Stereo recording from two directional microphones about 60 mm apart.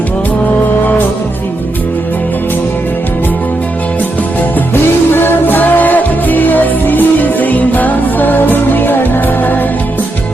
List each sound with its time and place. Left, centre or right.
4.7 s music: left